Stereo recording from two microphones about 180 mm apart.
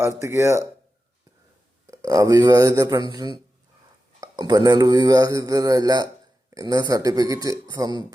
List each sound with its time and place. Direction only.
0.0 s speech: 15° right (ahead or behind)
1.9 s speech: 20° right (ahead or behind)